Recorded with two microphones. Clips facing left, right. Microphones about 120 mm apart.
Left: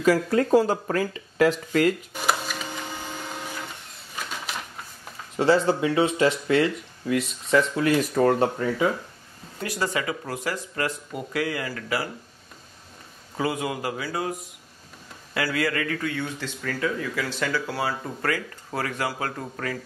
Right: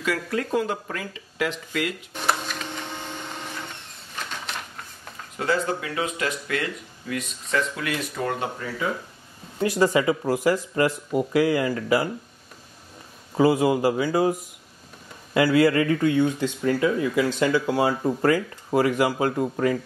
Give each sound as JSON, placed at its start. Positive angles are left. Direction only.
{"t": 0.0, "sound": "speech", "side_deg": 35}
{"t": 2.1, "sound": "printer", "side_deg": 5}
{"t": 5.4, "sound": "speech", "side_deg": 30}
{"t": 9.6, "sound": "speech", "side_deg": -25}
{"t": 13.4, "sound": "speech", "side_deg": -30}
{"t": 15.3, "sound": "speech", "side_deg": -25}